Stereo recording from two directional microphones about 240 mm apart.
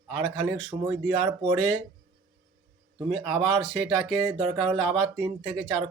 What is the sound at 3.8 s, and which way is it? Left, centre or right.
Speech, centre.